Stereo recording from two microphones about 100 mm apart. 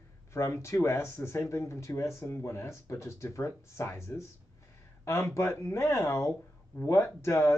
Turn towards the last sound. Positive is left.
turn(degrees=25)  # may be behind; listen again after turning